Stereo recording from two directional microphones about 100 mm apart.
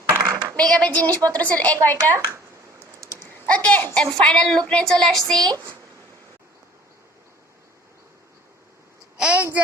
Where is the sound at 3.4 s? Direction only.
15° left (ahead or behind).